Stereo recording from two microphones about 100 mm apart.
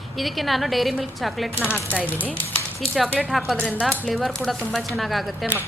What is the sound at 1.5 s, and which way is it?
Speech, 25° right (ahead or behind).